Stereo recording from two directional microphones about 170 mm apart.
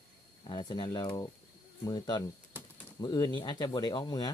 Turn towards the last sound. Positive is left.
turn(degrees=25)  # may be behind; listen again after turning